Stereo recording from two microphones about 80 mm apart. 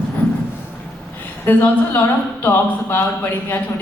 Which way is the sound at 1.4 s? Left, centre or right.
Left.